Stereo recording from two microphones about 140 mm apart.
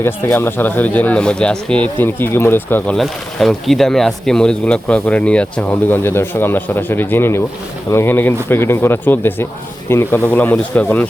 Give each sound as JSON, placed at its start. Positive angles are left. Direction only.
{"t": 0.0, "sound": "speech", "side_deg": 15}